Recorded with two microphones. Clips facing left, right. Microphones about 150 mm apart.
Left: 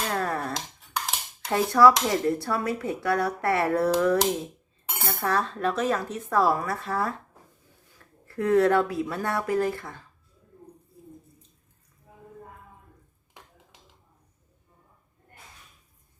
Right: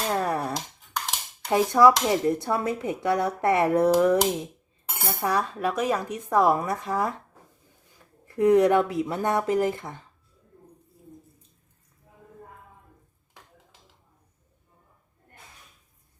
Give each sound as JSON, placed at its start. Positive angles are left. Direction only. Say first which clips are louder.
{"t": 0.1, "sound": "finger snapping", "louder": "right 5 dB", "side_deg": -15}
{"t": 1.5, "sound": "speech", "louder": "right 1 dB", "side_deg": -20}